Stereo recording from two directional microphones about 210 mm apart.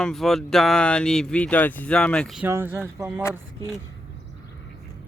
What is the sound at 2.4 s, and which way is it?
Speech, 10° right (ahead or behind).